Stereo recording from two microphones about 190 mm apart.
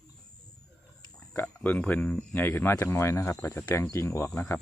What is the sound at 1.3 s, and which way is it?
Speech, 10° left (ahead or behind).